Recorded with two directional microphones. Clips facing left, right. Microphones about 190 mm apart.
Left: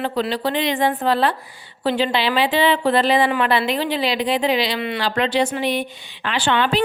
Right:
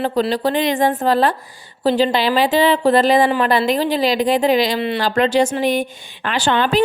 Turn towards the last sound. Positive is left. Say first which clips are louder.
# right 3 dB
turn(degrees=-40)  # may be behind; listen again after turning